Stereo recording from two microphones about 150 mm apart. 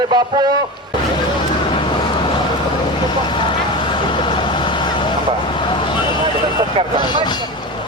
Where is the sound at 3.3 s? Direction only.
35° left (ahead or behind).